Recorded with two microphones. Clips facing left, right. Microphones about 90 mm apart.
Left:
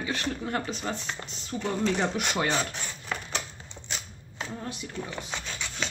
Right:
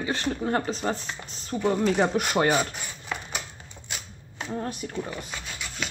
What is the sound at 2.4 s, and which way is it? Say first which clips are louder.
Cutlery: right 5 dB; 10° right (ahead or behind).